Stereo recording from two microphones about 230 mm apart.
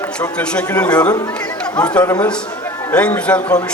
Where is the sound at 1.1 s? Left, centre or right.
Centre.